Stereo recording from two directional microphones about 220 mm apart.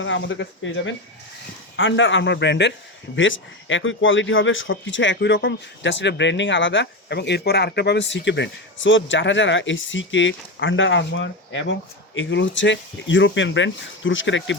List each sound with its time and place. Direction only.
0.0 s speech: 60° left (ahead or behind)